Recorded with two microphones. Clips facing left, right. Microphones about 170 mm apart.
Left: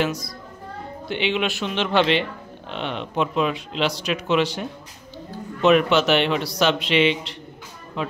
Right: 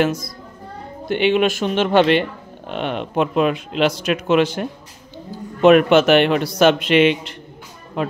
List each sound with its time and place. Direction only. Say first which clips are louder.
0.0 s speech: right 5 dB; 50° right (ahead or behind)